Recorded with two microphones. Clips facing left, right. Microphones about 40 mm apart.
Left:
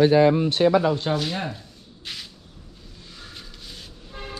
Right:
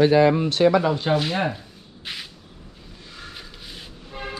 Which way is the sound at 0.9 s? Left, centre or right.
Centre.